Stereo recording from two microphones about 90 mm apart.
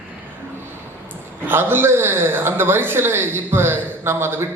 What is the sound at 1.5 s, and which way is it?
Speech, 25° right (ahead or behind).